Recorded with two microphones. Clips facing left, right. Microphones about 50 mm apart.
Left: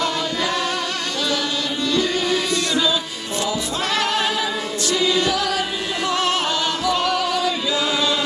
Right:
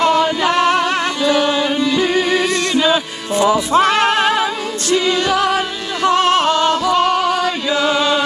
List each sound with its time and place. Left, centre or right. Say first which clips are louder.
0.0 s music: right 8 dB; right
1.2 s music: right 9 dB; right
1.8 s music: right 5 dB; centre
2.7 s music: right 6 dB; right
3.3 s music: right 11 dB; right